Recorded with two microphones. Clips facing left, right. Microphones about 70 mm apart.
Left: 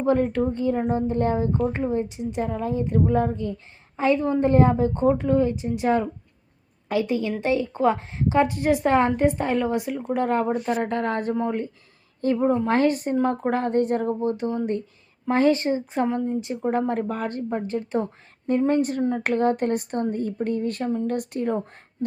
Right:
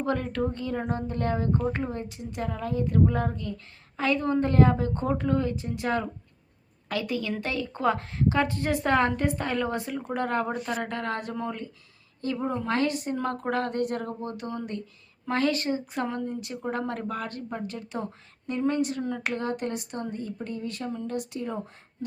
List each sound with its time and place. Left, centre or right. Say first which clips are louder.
0.0 s speech: left 7 dB; left
10.7 s speech: left 6 dB; left
11.3 s speech: left 8 dB; left
12.2 s a woman's voice: left 8 dB; left
13.1 s speech: left 5 dB; centre; by 21.6 s left